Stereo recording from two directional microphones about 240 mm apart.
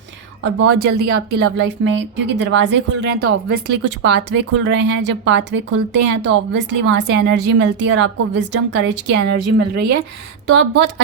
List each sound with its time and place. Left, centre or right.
0.4 s a woman's voice: right